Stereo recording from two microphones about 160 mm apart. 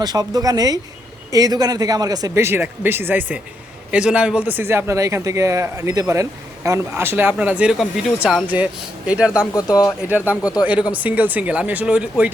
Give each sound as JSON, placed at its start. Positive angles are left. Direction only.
{"t": 0.0, "sound": "a man's voice", "side_deg": -25}
{"t": 9.6, "sound": "speech", "side_deg": 25}
{"t": 10.1, "sound": "a man's voice", "side_deg": -10}
{"t": 10.4, "sound": "speech", "side_deg": 25}
{"t": 10.7, "sound": "a man's voice", "side_deg": -10}